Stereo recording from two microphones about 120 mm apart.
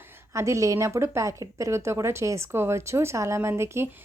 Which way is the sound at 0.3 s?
25° right (ahead or behind).